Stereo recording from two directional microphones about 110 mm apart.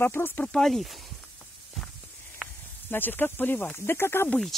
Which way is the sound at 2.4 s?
Centre (ahead or behind).